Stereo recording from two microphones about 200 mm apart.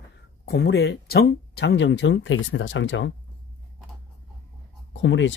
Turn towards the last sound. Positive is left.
turn(degrees=65)  # may be behind; listen again after turning